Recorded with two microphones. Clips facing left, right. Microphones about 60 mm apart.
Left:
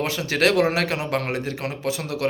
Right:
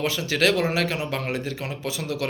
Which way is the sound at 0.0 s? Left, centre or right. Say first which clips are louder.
Left 1 dB; left.